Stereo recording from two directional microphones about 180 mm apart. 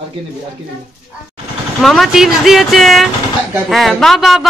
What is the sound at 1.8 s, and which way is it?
Speech, centre (ahead or behind).